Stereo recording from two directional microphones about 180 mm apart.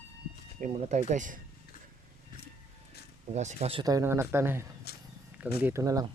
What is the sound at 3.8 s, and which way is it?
Speech, 20° right (ahead or behind).